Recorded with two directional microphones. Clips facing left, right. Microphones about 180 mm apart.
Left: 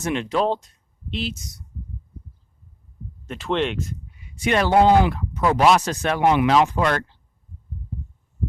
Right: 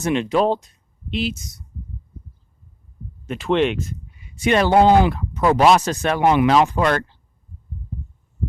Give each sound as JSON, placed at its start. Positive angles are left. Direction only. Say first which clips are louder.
{"t": 0.0, "sound": "speech", "louder": "right 4 dB", "side_deg": -20}
{"t": 3.2, "sound": "speech", "louder": "right 5 dB", "side_deg": -10}
{"t": 4.4, "sound": "speech", "louder": "right 2 dB", "side_deg": -25}